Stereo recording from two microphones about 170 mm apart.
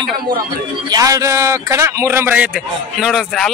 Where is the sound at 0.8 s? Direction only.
20° right (ahead or behind).